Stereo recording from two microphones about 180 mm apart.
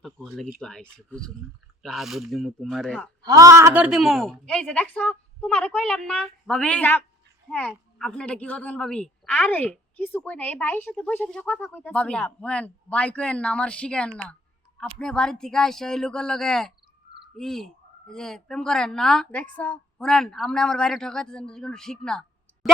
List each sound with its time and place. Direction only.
0.0 s a woman's voice: centre (ahead or behind)
3.2 s a woman's voice: 20° right (ahead or behind); by 22.3 s 5° left (ahead or behind)